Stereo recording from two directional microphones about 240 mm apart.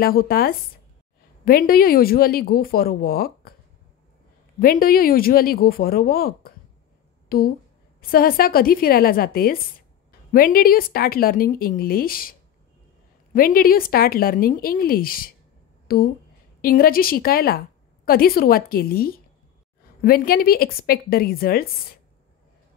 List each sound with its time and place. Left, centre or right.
0.0 s speech: left
4.6 s speech: left